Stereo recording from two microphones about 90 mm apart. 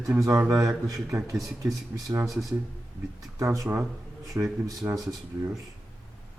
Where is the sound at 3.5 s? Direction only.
35° right (ahead or behind).